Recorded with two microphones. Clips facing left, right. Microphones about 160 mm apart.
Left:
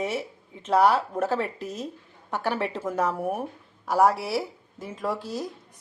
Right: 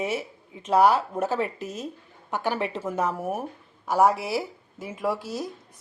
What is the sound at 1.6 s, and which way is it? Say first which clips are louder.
Speech: left 1 dB; 30° left (ahead or behind).